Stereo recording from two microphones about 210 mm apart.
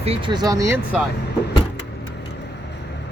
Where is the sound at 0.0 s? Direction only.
25° right (ahead or behind).